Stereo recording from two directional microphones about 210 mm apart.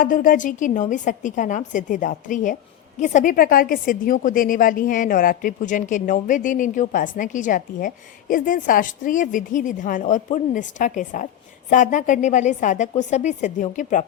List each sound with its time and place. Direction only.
0.0 s a woman's voice: 40° left (ahead or behind)